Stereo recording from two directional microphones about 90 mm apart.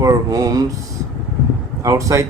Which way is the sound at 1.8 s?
35° right (ahead or behind).